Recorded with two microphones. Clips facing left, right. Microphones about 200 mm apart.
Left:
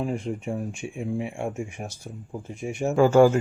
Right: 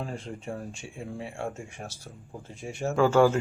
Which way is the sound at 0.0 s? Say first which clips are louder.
Left 8 dB; 15° left (ahead or behind).